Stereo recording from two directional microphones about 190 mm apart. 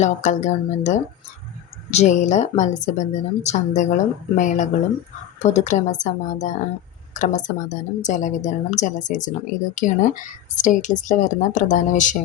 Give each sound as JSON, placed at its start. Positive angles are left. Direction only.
{"t": 0.0, "sound": "a woman's voice", "side_deg": 40}